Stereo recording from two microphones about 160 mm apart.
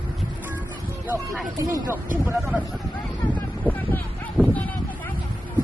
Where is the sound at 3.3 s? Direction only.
10° left (ahead or behind).